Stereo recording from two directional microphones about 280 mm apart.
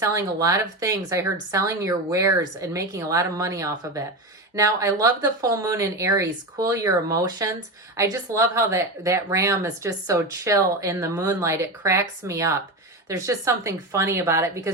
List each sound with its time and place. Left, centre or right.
0.0 s speech: centre